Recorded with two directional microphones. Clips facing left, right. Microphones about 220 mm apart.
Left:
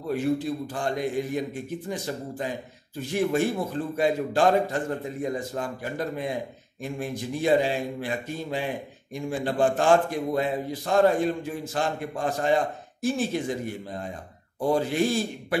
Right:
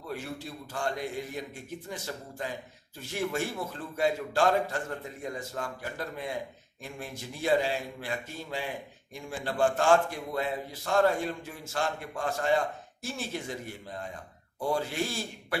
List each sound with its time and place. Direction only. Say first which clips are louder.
0.1 s a man's voice: left 13 dB; 15° left (ahead or behind)